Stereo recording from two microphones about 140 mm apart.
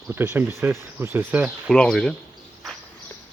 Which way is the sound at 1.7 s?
5° left (ahead or behind).